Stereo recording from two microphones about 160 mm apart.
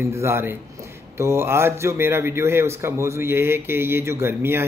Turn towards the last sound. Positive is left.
turn(degrees=-15)  # may be behind; listen again after turning